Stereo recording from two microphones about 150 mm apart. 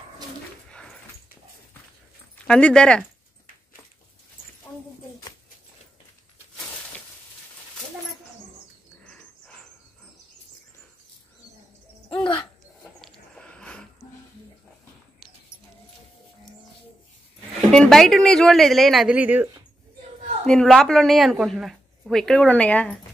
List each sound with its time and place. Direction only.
0.7 s dog: 5° left (ahead or behind)
2.3 s speech: 5° left (ahead or behind)
12.1 s hoot: 35° left (ahead or behind)
13.0 s a sound: 5° left (ahead or behind)
17.6 s speech: 5° left (ahead or behind); by 19.5 s 10° right (ahead or behind)
20.4 s speech: centre (ahead or behind)